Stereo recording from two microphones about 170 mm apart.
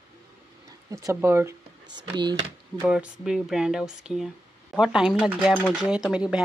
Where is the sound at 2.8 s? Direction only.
5° right (ahead or behind).